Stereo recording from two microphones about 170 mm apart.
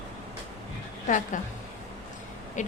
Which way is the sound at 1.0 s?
50° left (ahead or behind).